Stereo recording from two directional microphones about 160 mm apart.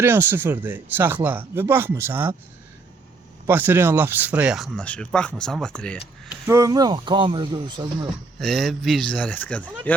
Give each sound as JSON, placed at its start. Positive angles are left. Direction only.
{"t": 0.0, "sound": "speech", "side_deg": -15}
{"t": 3.4, "sound": "speech", "side_deg": -10}
{"t": 6.5, "sound": "speech", "side_deg": -20}
{"t": 8.4, "sound": "speech", "side_deg": 0}